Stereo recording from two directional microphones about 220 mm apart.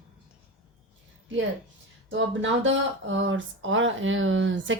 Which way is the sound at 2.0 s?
60° right (ahead or behind).